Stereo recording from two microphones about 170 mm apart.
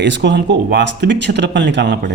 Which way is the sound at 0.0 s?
90° right.